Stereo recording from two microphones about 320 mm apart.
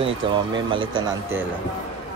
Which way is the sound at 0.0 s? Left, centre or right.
Centre.